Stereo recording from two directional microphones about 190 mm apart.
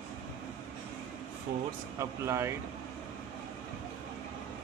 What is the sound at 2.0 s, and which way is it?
Speech, 15° right (ahead or behind).